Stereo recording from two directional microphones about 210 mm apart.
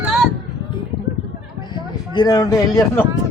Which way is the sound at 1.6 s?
20° left (ahead or behind).